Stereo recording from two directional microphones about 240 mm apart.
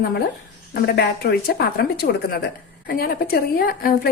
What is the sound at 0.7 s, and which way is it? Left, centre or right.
A woman's voice, left.